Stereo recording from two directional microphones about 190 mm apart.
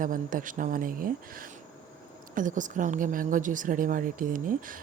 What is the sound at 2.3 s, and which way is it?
A woman's voice, 45° right (ahead or behind).